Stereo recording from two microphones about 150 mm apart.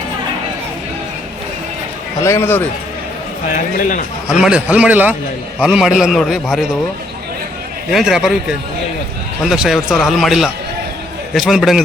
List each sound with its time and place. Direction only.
2.2 s a man's voice: 15° left (ahead or behind)
3.5 s speech: 60° left (ahead or behind)
4.3 s a man's voice: 5° right (ahead or behind)
7.9 s a man's voice: 5° right (ahead or behind)